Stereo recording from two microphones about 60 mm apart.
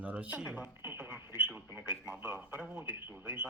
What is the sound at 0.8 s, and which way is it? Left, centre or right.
Speech, right.